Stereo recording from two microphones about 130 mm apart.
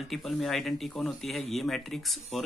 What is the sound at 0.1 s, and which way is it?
Speech, centre (ahead or behind).